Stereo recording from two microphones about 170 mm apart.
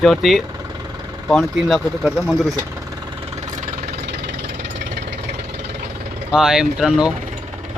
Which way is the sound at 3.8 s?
75° right (ahead or behind).